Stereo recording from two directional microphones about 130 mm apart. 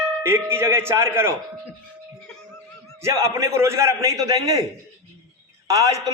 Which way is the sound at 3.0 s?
20° right (ahead or behind).